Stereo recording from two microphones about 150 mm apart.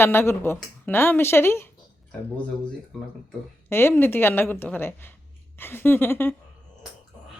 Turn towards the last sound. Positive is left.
turn(degrees=15)  # may be behind; listen again after turning